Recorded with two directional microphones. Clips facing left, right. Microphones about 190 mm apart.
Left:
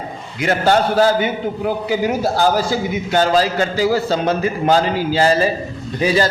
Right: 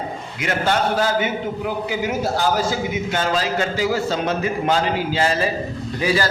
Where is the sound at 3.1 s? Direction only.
35° left (ahead or behind).